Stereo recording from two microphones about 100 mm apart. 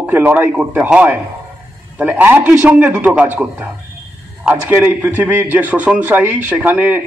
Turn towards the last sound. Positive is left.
turn(degrees=-15)  # may be behind; listen again after turning